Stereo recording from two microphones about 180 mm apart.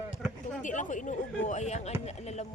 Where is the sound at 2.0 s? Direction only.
35° left (ahead or behind).